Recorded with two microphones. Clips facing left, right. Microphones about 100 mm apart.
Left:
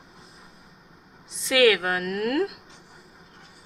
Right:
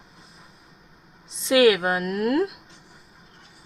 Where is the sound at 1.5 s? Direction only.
20° right (ahead or behind).